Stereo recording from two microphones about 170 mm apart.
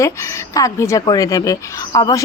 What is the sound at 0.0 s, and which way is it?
A woman's voice, 15° left (ahead or behind).